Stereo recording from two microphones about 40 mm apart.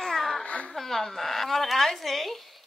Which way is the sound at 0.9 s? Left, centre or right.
Centre.